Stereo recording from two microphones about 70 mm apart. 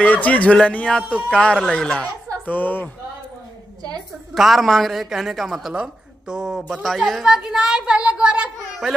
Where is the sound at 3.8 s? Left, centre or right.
Right.